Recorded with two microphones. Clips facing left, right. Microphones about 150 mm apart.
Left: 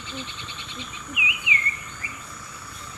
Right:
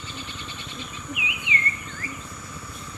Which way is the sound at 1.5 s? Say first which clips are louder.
Right 2 dB; 30° right (ahead or behind).